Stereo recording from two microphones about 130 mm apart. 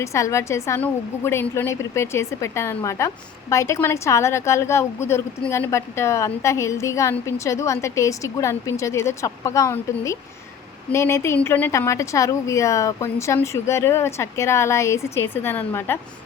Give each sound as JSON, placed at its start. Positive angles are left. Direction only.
{"t": 0.0, "sound": "a woman's voice", "side_deg": 25}